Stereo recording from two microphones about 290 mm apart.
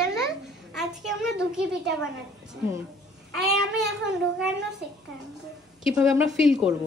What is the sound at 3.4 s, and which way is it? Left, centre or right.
Speech, centre.